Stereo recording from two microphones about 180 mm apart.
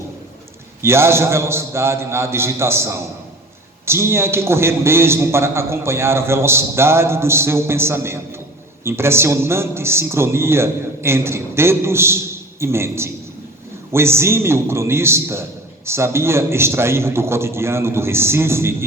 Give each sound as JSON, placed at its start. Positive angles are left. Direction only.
{"t": 0.8, "sound": "a man's voice", "side_deg": -15}